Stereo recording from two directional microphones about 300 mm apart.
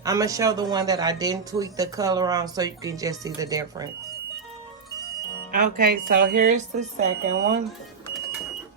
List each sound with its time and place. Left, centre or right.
0.0 s speech: centre
5.5 s speech: right